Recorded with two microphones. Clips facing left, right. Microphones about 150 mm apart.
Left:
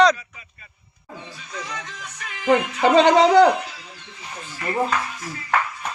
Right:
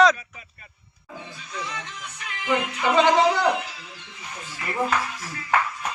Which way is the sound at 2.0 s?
45° left (ahead or behind).